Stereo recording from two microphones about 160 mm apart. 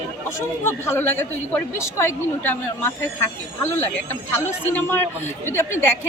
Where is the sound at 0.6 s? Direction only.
15° left (ahead or behind).